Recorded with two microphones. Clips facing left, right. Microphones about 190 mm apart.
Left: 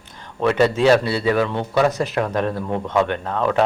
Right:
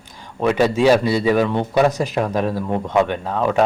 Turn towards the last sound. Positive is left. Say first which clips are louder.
# right 1 dB
turn(degrees=-10)  # may be behind; listen again after turning